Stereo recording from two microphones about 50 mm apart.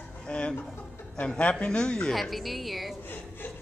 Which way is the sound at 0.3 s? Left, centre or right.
Left.